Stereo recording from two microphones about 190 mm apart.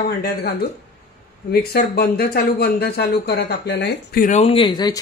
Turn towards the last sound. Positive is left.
turn(degrees=20)  # may be behind; listen again after turning